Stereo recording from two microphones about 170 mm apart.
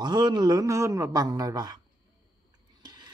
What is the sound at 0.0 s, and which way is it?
Speech, 25° right (ahead or behind).